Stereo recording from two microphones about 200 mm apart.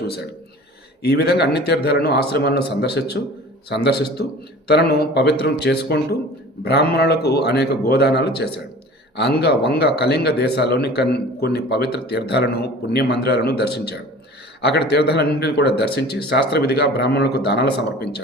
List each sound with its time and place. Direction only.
1.0 s a man's voice: 55° left (ahead or behind)